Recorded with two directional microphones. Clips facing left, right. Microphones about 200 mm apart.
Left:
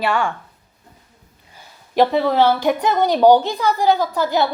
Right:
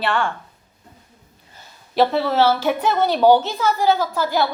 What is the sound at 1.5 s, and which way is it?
A woman's voice, 15° left (ahead or behind).